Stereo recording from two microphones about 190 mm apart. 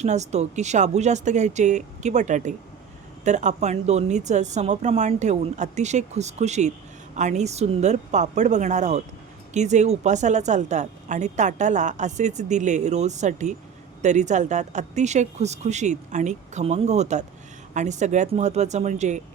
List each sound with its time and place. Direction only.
0.0 s a woman's voice: 35° right (ahead or behind)